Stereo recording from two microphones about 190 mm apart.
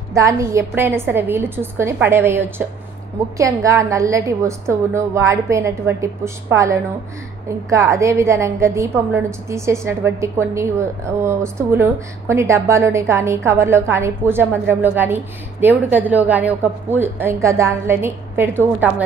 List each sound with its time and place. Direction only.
0.1 s a woman's voice: 15° right (ahead or behind)